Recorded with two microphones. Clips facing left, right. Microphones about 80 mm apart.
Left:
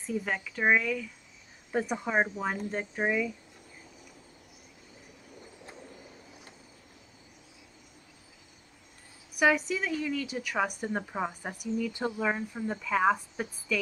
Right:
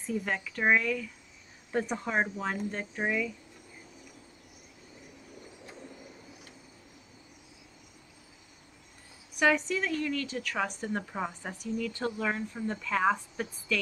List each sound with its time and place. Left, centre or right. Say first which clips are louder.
0.0 s a woman's voice: even; centre
9.4 s a woman's voice: left 1 dB; centre